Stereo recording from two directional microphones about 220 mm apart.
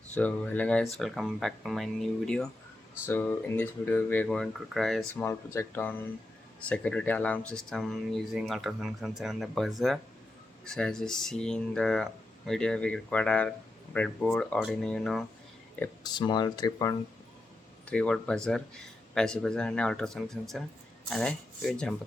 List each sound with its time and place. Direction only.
0.1 s speech: 5° left (ahead or behind)
16.0 s speech: 20° left (ahead or behind)
17.8 s speech: 5° left (ahead or behind)